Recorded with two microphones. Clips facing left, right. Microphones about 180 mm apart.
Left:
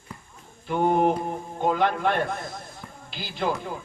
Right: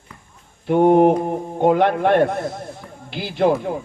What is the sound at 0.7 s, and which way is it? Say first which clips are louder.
Speech: right 9 dB; 60° right (ahead or behind).